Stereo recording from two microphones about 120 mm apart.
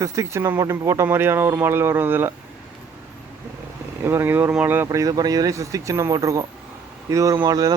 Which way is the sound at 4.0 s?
20° right (ahead or behind).